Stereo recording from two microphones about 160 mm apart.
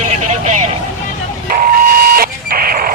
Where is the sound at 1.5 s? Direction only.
60° right (ahead or behind).